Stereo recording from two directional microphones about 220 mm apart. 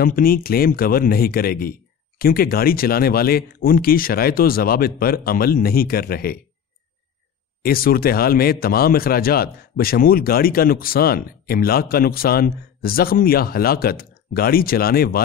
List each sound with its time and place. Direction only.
0.0 s speech: 40° left (ahead or behind)
7.6 s speech: 40° left (ahead or behind)